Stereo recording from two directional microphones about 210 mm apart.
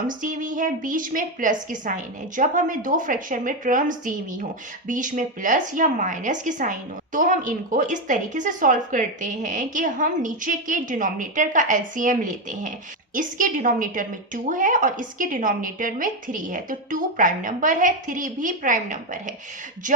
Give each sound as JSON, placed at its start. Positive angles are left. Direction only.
{"t": 0.1, "sound": "a woman's voice", "side_deg": -40}